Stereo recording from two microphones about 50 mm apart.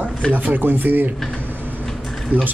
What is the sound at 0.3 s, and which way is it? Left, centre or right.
Speech, right.